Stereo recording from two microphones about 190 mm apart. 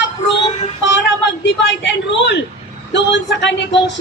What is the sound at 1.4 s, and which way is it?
A woman's voice, 70° left (ahead or behind).